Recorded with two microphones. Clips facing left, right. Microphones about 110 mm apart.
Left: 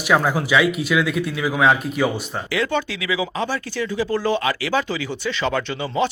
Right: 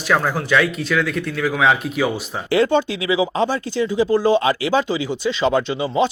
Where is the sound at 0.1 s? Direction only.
10° left (ahead or behind).